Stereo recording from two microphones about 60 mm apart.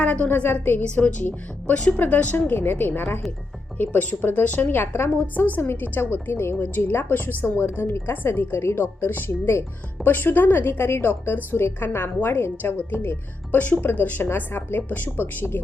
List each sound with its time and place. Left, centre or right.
0.0 s a woman's voice: left